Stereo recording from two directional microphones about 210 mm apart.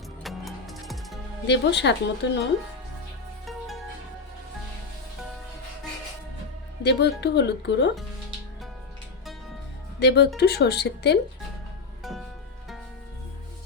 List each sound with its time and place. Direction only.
0.2 s music: centre (ahead or behind)
1.5 s speech: 55° left (ahead or behind)
6.8 s speech: 55° left (ahead or behind)
10.0 s speech: 50° left (ahead or behind)